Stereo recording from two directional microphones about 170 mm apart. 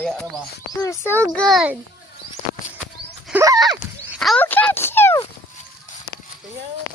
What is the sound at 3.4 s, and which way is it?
Horse, 20° right (ahead or behind).